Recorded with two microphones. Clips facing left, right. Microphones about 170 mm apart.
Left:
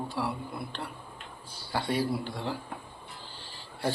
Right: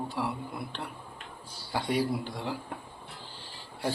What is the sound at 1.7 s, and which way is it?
Speech, 15° right (ahead or behind).